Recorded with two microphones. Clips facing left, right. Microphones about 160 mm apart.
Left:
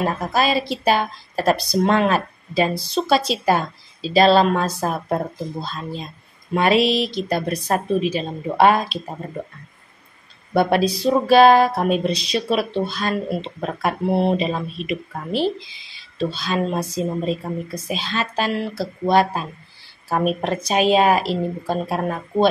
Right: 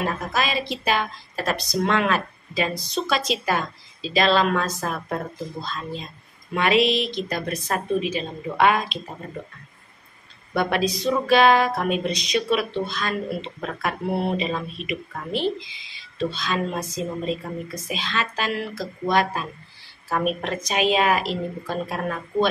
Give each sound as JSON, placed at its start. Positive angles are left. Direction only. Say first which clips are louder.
{"t": 0.0, "sound": "a woman's voice", "louder": "left 5 dB", "side_deg": 35}
{"t": 10.5, "sound": "a woman's voice", "louder": "left 5 dB", "side_deg": 35}